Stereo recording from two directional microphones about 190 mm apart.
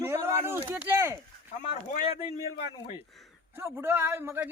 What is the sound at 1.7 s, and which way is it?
Speech, 40° left (ahead or behind).